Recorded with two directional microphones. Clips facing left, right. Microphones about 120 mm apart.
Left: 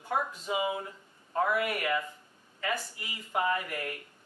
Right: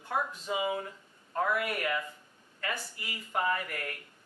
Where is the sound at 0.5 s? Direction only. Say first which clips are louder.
Left 1 dB; 15° left (ahead or behind).